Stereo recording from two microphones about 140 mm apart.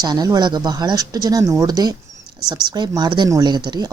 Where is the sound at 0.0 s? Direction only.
30° right (ahead or behind).